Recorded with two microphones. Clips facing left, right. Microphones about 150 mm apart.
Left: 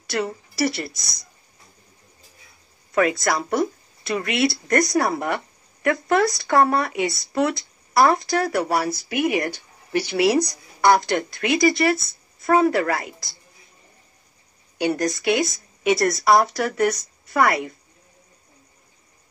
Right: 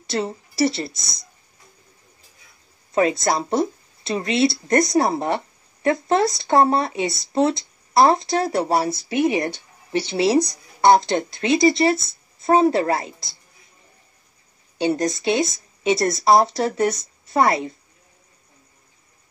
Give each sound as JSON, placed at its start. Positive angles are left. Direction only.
{"t": 0.0, "sound": "speech", "side_deg": -25}
{"t": 2.9, "sound": "a woman's voice", "side_deg": -25}
{"t": 14.8, "sound": "a woman's voice", "side_deg": -25}